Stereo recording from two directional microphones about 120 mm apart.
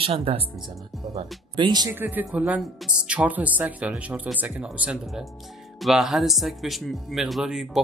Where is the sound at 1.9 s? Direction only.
15° right (ahead or behind).